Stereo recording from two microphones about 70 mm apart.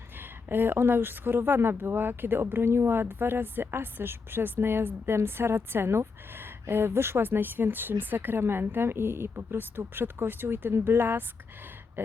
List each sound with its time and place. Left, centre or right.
0.4 s speech: right